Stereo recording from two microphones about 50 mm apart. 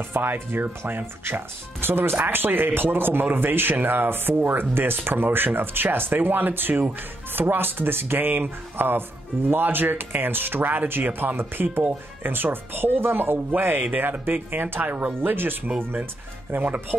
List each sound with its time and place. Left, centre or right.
0.1 s speech: right